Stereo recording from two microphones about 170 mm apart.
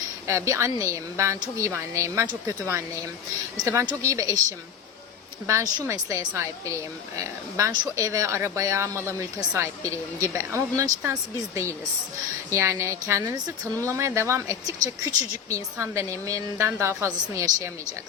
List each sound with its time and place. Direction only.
0.3 s speech: 15° right (ahead or behind)
3.6 s speech: 20° right (ahead or behind)
5.5 s speech: 15° right (ahead or behind)